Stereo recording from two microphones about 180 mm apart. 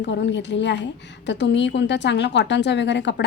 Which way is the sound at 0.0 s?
75° left (ahead or behind).